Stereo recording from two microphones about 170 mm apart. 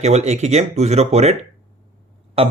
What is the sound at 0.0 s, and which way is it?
Speech, 40° right (ahead or behind).